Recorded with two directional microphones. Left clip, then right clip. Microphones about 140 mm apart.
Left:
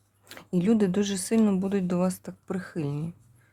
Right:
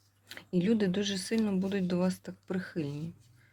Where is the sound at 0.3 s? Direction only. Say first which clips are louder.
Left 4 dB; 30° left (ahead or behind).